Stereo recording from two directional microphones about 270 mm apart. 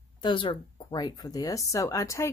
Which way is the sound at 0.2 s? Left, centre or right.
Centre.